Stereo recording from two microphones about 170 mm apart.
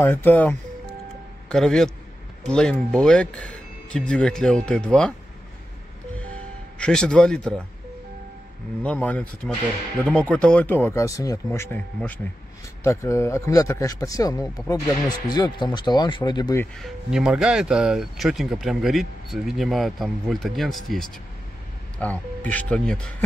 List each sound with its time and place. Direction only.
0.0 s speech: 10° left (ahead or behind)
6.8 s speech: 5° left (ahead or behind)
8.8 s speech: 10° left (ahead or behind); by 16.5 s 25° left (ahead or behind)
16.7 s speech: centre (ahead or behind)